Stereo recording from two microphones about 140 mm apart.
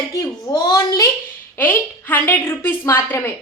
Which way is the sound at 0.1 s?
25° left (ahead or behind).